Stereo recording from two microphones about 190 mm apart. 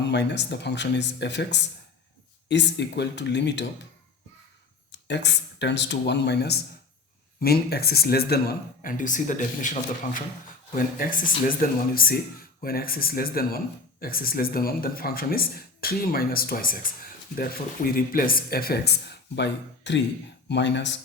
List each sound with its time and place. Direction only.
0.0 s speech: 65° left (ahead or behind)
4.9 s speech: 65° left (ahead or behind)